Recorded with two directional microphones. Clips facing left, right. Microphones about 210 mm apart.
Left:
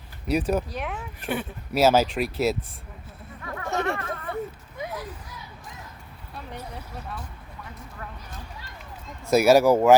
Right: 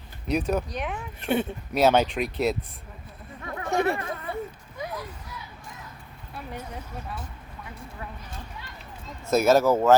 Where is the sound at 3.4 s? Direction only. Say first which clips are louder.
Right 3 dB; 15° right (ahead or behind).